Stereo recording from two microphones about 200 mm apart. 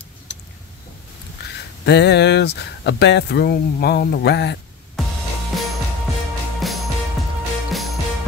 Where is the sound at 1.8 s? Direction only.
55° left (ahead or behind).